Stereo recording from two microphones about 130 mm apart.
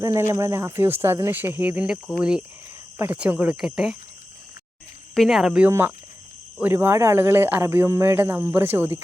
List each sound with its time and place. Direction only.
0.0 s speech: 20° right (ahead or behind); by 3.9 s 5° right (ahead or behind)
5.1 s speech: centre (ahead or behind)